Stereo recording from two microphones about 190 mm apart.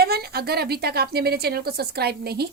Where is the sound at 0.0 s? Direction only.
55° right (ahead or behind).